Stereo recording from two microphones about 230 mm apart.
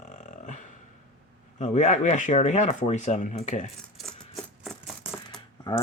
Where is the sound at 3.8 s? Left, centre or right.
Centre.